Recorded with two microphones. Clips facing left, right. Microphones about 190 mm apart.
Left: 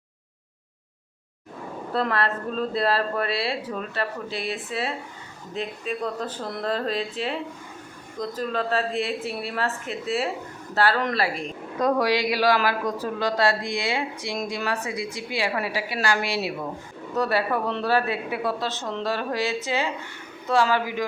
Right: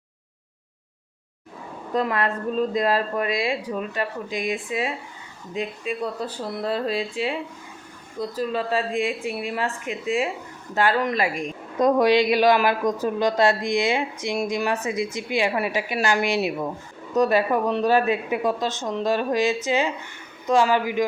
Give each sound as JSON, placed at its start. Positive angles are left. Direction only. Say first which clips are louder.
{"t": 1.9, "sound": "speech", "louder": "right 2 dB", "side_deg": -15}